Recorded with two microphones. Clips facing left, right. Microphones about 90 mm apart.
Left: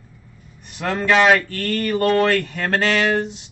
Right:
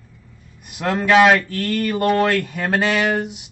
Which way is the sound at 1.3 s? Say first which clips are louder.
Right 1 dB; 10° right (ahead or behind).